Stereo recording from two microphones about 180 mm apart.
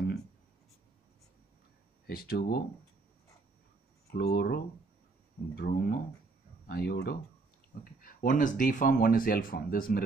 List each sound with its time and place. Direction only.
2.0 s speech: 60° left (ahead or behind)
4.1 s speech: 60° left (ahead or behind)
7.8 s speech: 50° left (ahead or behind)